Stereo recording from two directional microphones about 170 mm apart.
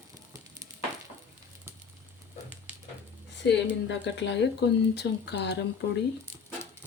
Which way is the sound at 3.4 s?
90° left.